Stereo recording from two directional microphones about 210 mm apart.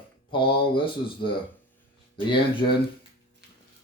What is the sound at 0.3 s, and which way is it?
Speech, 25° left (ahead or behind).